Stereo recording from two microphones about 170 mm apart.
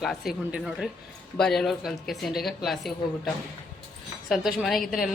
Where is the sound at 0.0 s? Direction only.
Centre (ahead or behind).